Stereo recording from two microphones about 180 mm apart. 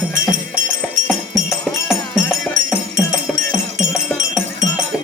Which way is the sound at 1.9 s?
10° left (ahead or behind).